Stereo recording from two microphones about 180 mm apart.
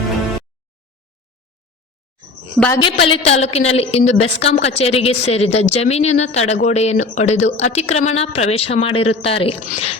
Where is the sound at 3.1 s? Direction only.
35° left (ahead or behind).